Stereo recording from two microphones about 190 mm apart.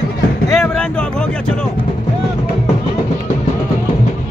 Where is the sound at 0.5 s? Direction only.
5° left (ahead or behind).